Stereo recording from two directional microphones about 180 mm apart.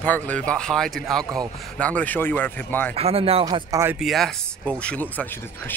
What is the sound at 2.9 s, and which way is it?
Speech, 35° right (ahead or behind).